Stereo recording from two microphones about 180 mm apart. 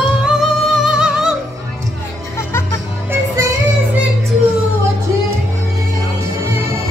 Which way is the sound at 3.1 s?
20° right (ahead or behind).